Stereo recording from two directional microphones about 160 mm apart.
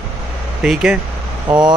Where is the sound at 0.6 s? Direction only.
5° right (ahead or behind).